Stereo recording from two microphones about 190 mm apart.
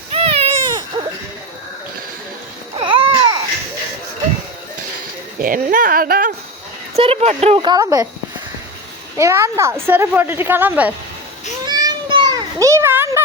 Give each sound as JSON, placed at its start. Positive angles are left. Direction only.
{"t": 0.1, "sound": "baby cry", "side_deg": -30}
{"t": 2.7, "sound": "baby cry", "side_deg": -25}
{"t": 5.4, "sound": "speech", "side_deg": -45}
{"t": 6.9, "sound": "speech", "side_deg": -30}
{"t": 9.1, "sound": "a woman's voice", "side_deg": -15}
{"t": 11.6, "sound": "children playing", "side_deg": -20}